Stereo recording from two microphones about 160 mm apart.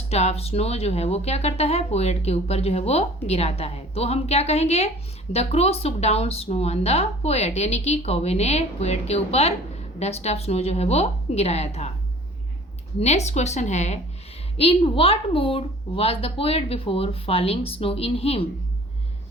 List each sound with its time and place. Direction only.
0.1 s speech: 40° left (ahead or behind)
13.0 s speech: 45° left (ahead or behind)